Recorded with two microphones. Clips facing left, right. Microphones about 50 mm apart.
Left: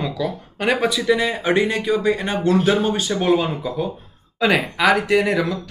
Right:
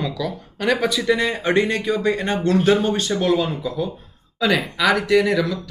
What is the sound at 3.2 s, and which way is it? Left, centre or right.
Speech, left.